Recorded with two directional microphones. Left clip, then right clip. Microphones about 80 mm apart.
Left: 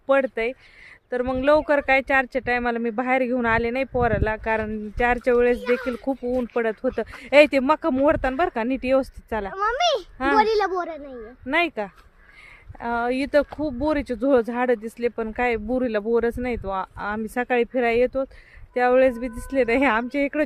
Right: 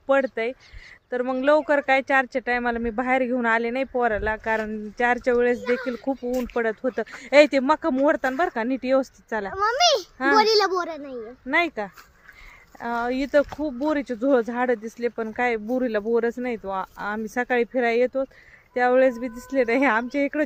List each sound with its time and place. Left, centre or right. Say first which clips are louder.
0.1 s speech: left 1 dB; left
9.6 s a child's voice: right 2 dB; right
10.3 s a child's voice: right 1 dB; right
11.5 s speech: even; left